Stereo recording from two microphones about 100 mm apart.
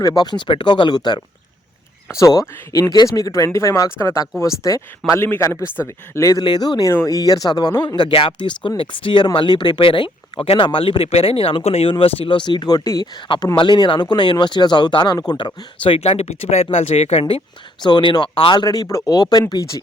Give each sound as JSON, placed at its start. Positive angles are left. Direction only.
{"t": 0.0, "sound": "speech", "side_deg": 40}
{"t": 2.0, "sound": "speech", "side_deg": 35}
{"t": 6.4, "sound": "speech", "side_deg": 45}
{"t": 10.6, "sound": "speech", "side_deg": 60}
{"t": 13.6, "sound": "speech", "side_deg": 50}
{"t": 18.1, "sound": "speech", "side_deg": 55}
{"t": 18.6, "sound": "speech", "side_deg": 40}